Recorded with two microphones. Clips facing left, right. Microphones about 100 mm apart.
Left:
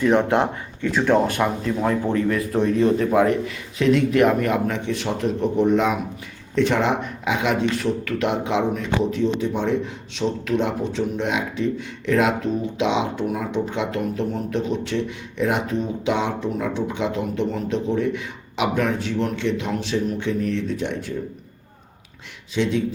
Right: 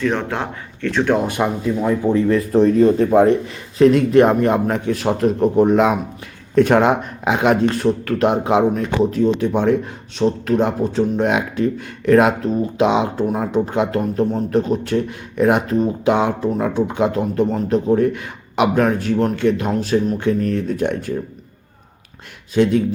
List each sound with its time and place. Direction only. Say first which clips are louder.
0.0 s speech: left 3 dB; 15° left (ahead or behind)
0.9 s speech: right 1 dB; 5° left (ahead or behind)
1.6 s speech: right 4 dB; 10° right (ahead or behind)
2.3 s a man's voice: right 6 dB; 30° right (ahead or behind)
5.6 s a man's voice: right 4 dB; 55° right (ahead or behind)
10.2 s a man's voice: right 5 dB; 40° right (ahead or behind)
22.5 s a man's voice: right 7 dB; 50° right (ahead or behind)